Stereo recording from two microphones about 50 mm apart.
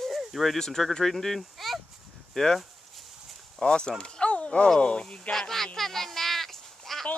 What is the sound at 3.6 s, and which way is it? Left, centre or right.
Speech, centre.